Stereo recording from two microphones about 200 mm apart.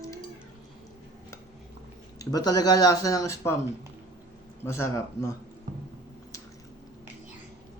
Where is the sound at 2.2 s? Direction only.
20° left (ahead or behind).